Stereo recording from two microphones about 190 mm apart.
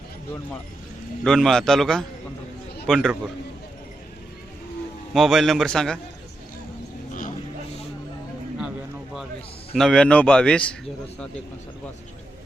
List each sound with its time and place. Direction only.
1.2 s speech: centre (ahead or behind)
5.1 s speech: centre (ahead or behind)
7.1 s a sound: 45° left (ahead or behind)
9.7 s speech: 5° left (ahead or behind)